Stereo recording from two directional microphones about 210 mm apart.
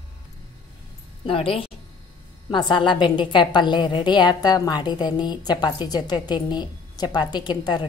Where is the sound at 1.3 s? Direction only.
25° left (ahead or behind).